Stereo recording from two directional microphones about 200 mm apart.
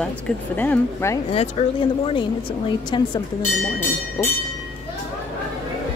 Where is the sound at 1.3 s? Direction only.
30° left (ahead or behind).